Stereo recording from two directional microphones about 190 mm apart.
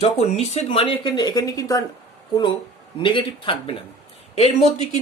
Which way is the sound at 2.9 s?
25° left (ahead or behind).